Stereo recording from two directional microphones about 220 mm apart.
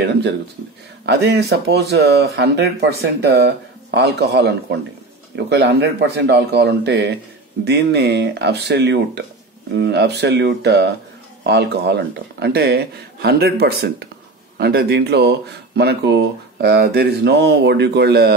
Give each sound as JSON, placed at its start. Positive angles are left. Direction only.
{"t": 1.0, "sound": "speech", "side_deg": -50}